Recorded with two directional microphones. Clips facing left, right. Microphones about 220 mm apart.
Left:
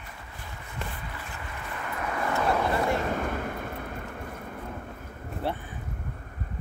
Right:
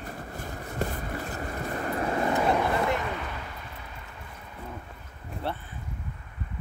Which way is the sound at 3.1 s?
50° left (ahead or behind).